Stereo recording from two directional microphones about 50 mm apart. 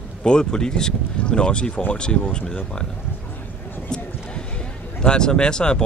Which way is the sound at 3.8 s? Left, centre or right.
Centre.